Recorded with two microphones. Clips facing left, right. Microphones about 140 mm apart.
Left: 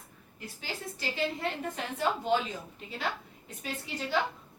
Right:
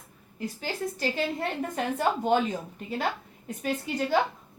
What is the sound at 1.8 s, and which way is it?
Speech, 50° right (ahead or behind).